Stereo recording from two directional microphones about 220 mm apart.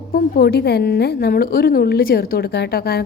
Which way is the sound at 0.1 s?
45° left (ahead or behind).